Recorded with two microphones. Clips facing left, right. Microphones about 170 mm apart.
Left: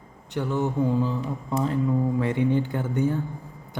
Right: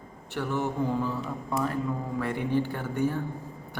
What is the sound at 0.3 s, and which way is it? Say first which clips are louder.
Mantra: left 4 dB; 15° left (ahead or behind).